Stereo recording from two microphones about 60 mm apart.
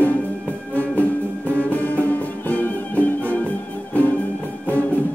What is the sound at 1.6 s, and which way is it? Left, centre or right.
Music, left.